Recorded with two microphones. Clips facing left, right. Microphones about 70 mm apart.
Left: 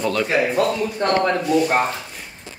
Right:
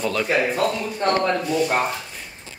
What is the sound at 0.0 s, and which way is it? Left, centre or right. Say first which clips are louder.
Speech: left 2 dB; centre.